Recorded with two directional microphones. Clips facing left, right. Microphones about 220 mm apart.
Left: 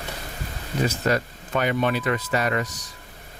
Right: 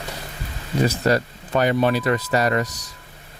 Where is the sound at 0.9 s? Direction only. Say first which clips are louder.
Right 4 dB; 35° right (ahead or behind).